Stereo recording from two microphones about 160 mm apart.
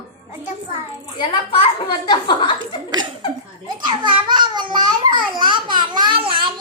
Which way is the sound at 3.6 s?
30° right (ahead or behind).